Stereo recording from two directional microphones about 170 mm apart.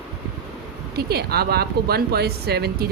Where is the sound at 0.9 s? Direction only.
70° right (ahead or behind).